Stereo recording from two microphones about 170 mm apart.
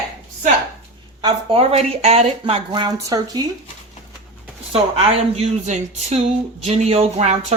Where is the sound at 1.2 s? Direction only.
35° right (ahead or behind).